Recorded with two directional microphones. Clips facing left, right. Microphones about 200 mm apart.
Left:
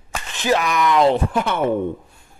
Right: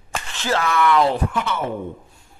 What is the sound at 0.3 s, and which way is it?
Speech, 15° left (ahead or behind).